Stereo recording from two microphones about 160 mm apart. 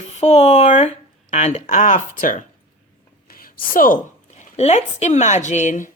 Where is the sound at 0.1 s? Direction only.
45° left (ahead or behind).